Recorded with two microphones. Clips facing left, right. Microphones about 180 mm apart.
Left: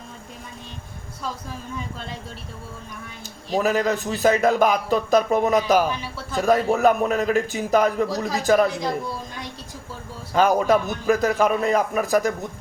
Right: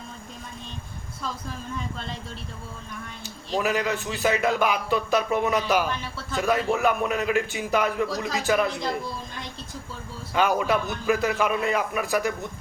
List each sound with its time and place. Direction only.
3.6 s a man's voice: 40° left (ahead or behind)
10.3 s a man's voice: 40° left (ahead or behind)